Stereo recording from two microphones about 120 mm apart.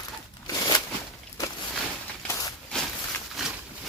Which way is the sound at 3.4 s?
Centre (ahead or behind).